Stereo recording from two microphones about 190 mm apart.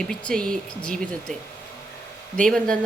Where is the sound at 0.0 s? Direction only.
5° left (ahead or behind).